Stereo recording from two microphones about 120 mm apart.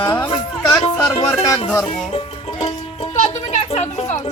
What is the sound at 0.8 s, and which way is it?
Speech, 60° left (ahead or behind).